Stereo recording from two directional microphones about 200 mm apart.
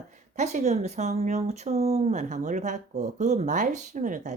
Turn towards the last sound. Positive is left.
turn(degrees=-40)  # may be behind; listen again after turning